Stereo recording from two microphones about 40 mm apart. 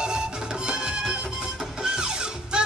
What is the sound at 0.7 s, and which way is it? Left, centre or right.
Music, right.